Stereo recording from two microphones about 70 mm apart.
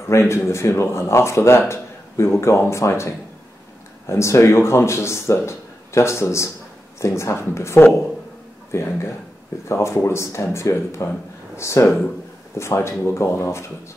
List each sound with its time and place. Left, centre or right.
0.1 s speech: left